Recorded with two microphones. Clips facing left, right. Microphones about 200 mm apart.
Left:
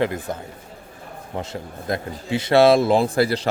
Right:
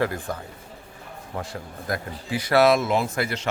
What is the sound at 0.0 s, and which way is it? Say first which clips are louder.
Speech: left 3 dB; 20° left (ahead or behind).